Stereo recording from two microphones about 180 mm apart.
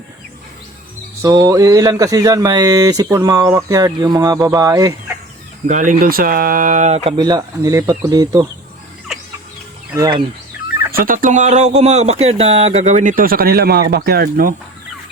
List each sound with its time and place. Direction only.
1.2 s speech: 20° right (ahead or behind)
5.6 s speech: 45° right (ahead or behind)
7.2 s speech: 20° right (ahead or behind)
9.9 s speech: 20° right (ahead or behind)
10.9 s speech: 50° right (ahead or behind)